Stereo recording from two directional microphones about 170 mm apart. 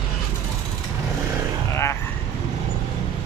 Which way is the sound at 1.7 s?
15° left (ahead or behind).